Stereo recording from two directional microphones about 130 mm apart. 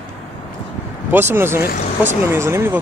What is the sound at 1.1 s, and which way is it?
Speech, 20° right (ahead or behind).